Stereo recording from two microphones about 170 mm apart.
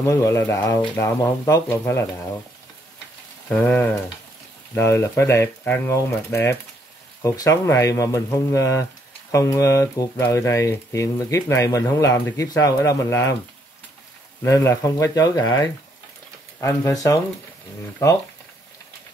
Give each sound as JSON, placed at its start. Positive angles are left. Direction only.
{"t": 0.0, "sound": "speech", "side_deg": 15}
{"t": 3.4, "sound": "speech", "side_deg": 10}
{"t": 14.4, "sound": "speech", "side_deg": 15}